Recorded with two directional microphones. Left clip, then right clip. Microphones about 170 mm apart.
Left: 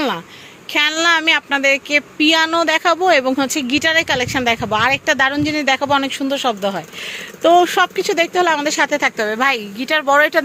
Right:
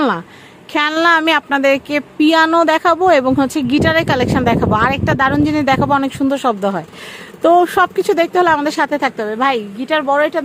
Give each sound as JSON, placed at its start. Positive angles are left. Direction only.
{"t": 0.7, "sound": "speech", "side_deg": -45}
{"t": 9.2, "sound": "speech", "side_deg": -15}